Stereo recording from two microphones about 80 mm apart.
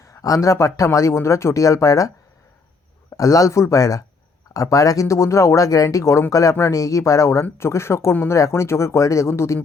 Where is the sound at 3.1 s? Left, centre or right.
Left.